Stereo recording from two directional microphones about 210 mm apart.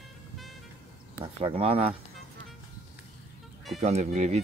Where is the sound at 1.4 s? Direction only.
30° right (ahead or behind).